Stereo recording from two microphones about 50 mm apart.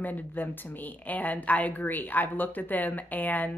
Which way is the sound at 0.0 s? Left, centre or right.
Left.